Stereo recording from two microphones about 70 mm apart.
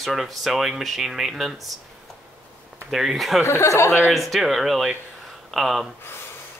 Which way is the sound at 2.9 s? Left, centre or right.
Centre.